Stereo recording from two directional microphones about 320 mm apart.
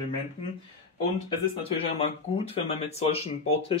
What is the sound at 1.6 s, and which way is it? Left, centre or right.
Speech, centre.